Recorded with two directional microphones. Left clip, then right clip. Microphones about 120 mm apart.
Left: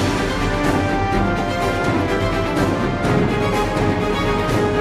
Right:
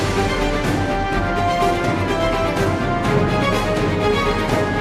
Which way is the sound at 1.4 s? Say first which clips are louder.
Right 2 dB; centre (ahead or behind).